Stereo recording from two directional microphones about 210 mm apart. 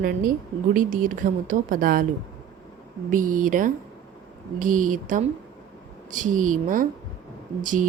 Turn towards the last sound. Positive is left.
turn(degrees=-40)  # may be behind; listen again after turning